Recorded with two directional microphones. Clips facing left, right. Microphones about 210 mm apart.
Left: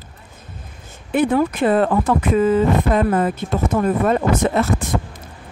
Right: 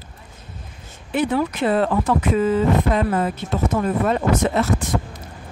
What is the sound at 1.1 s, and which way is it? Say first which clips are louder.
Speech: left 4 dB; 50° left (ahead or behind).